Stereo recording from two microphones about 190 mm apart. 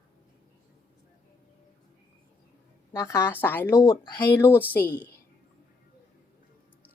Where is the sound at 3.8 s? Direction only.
25° left (ahead or behind).